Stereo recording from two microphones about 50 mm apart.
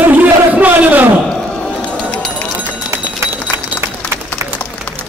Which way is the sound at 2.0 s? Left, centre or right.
Left.